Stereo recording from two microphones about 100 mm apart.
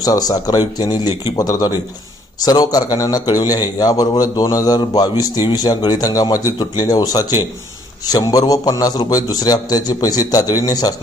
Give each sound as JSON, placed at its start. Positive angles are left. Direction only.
{"t": 0.0, "sound": "a man's voice", "side_deg": 40}